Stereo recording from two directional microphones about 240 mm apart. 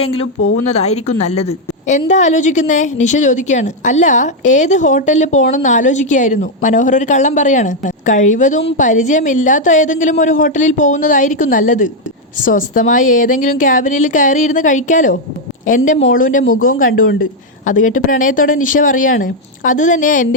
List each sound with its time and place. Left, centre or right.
0.0 s a woman's voice: left
17.7 s a woman's voice: left